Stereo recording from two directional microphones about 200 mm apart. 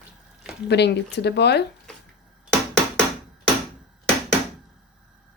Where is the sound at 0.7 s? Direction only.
55° left (ahead or behind).